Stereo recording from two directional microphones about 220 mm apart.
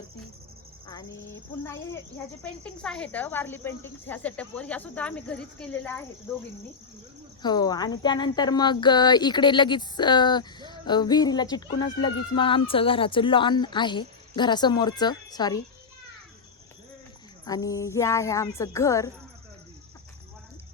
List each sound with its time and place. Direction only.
0.9 s speech: 15° left (ahead or behind)
17.4 s speech: 15° left (ahead or behind)